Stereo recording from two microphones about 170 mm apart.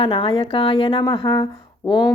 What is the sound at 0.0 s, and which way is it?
Speech, 30° left (ahead or behind).